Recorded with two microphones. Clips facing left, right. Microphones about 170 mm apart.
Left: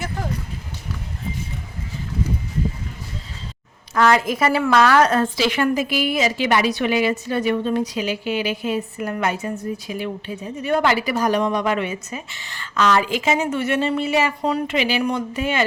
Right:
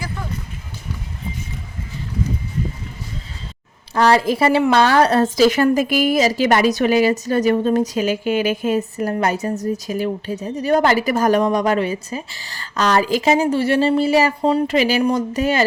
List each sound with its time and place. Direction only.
3.9 s a woman's voice: 35° right (ahead or behind)